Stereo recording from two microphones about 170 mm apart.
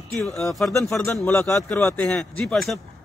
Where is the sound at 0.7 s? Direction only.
15° left (ahead or behind).